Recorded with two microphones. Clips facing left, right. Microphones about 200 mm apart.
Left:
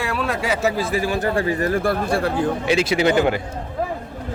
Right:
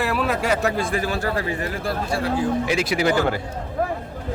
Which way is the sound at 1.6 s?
55° left (ahead or behind).